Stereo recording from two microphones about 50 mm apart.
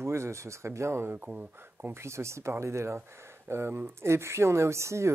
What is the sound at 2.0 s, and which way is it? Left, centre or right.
Speech, right.